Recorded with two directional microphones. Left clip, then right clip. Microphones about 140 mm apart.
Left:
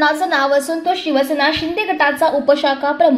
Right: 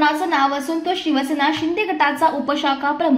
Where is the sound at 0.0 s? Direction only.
35° left (ahead or behind).